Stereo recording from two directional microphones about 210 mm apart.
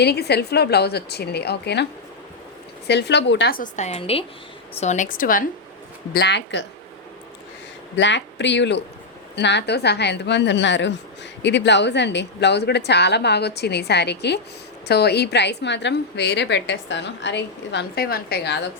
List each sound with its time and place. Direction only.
0.0 s a woman's voice: 50° left (ahead or behind)
6.1 s a woman's voice: 55° left (ahead or behind)
7.9 s a woman's voice: 55° left (ahead or behind)